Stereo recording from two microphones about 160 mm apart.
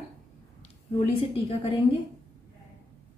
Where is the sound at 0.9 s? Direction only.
35° left (ahead or behind).